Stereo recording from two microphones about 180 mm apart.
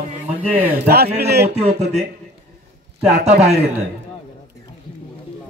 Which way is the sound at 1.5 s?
35° right (ahead or behind).